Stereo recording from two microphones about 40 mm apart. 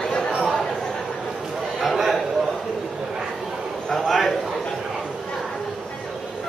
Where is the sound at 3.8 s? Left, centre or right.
Centre.